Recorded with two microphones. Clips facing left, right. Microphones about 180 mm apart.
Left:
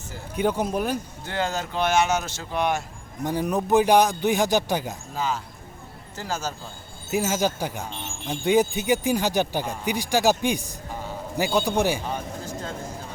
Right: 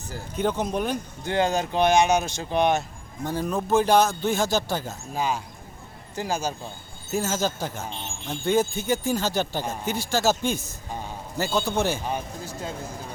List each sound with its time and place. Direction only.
0.3 s speech: 10° left (ahead or behind)
1.2 s speech: 15° right (ahead or behind)
3.2 s speech: 15° left (ahead or behind)
5.1 s speech: 15° right (ahead or behind)
7.1 s speech: 10° left (ahead or behind)
12.1 s a sound: 10° right (ahead or behind)